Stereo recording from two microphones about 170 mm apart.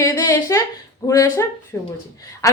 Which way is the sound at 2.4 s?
20° left (ahead or behind).